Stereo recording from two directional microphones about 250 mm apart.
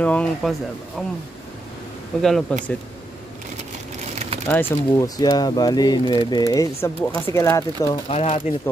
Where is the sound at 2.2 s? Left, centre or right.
Centre.